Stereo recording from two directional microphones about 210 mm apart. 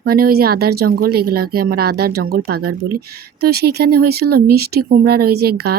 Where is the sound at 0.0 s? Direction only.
45° right (ahead or behind).